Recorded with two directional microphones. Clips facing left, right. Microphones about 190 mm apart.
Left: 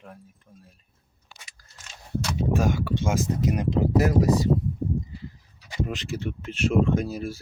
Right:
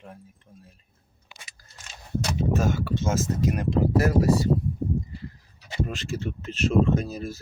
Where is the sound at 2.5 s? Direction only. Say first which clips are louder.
Left 3 dB; 15° left (ahead or behind).